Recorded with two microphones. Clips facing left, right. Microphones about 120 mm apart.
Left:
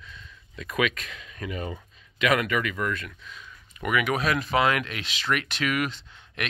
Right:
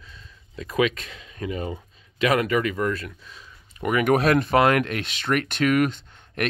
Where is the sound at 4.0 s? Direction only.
50° right (ahead or behind).